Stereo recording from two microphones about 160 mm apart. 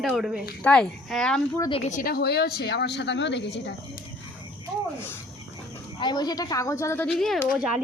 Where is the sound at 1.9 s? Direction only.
65° left (ahead or behind); by 3.8 s 90° left.